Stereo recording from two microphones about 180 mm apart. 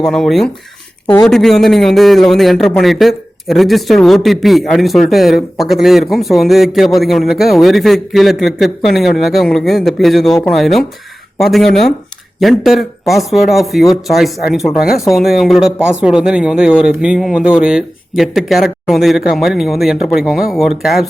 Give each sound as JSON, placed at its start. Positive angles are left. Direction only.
{"t": 0.0, "sound": "a man's voice", "side_deg": 0}
{"t": 1.0, "sound": "speech", "side_deg": 20}
{"t": 1.3, "sound": "a man's voice", "side_deg": 0}